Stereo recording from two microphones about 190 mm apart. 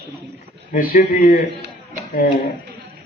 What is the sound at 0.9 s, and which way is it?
Speech, 50° left (ahead or behind).